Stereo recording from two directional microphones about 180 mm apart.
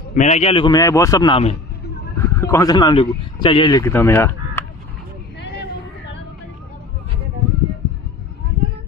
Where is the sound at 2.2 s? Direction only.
15° left (ahead or behind).